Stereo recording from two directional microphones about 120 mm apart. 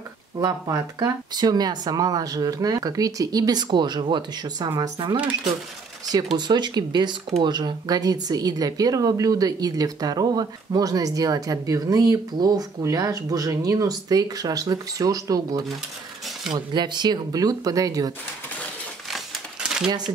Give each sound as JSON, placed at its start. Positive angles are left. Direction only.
{"t": 0.4, "sound": "a woman's voice", "side_deg": -30}
{"t": 6.3, "sound": "a woman's voice", "side_deg": -40}
{"t": 19.0, "sound": "crumpling", "side_deg": -5}